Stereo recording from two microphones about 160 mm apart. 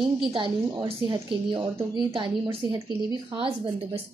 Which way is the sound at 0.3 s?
35° right (ahead or behind).